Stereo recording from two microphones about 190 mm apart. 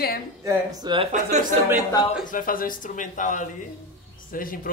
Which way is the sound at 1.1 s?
40° right (ahead or behind).